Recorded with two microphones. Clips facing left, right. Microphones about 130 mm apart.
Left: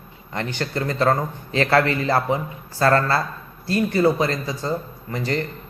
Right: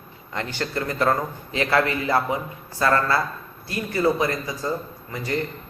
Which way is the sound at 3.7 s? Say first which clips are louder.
Left 3 dB; 30° left (ahead or behind).